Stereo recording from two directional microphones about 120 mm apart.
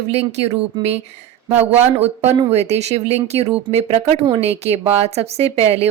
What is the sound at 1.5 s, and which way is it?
Speech, 15° right (ahead or behind).